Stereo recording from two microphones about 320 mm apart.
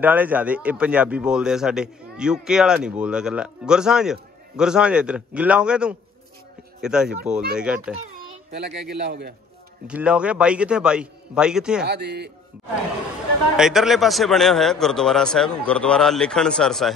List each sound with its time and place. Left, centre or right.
0.0 s a man's voice: centre
8.5 s a man's voice: right
9.8 s a man's voice: centre
11.9 s a man's voice: right
13.6 s a man's voice: centre